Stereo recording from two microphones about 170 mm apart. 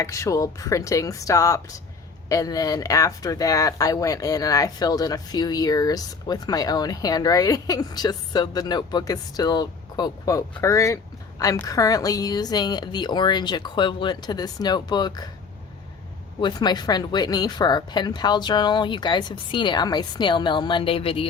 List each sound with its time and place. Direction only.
0.0 s speech: 20° left (ahead or behind)
16.4 s speech: 25° left (ahead or behind)